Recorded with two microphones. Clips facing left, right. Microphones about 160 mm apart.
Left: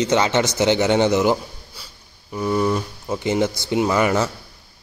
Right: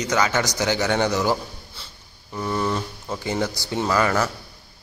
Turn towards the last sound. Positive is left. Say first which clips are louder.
# left 3 dB
turn(degrees=20)  # may be behind; listen again after turning